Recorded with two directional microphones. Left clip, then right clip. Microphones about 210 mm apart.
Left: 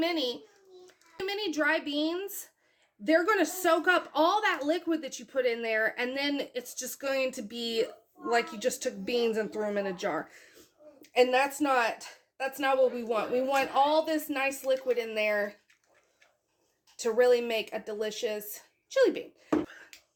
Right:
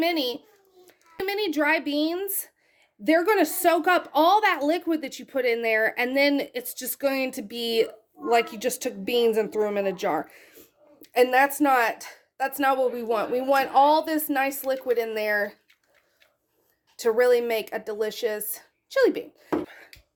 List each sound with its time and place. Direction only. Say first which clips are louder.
0.0 s a woman's voice: right 5 dB; 35° right (ahead or behind)
17.0 s speech: right 4 dB; 35° right (ahead or behind)
19.6 s a sound: right 3 dB; 25° right (ahead or behind)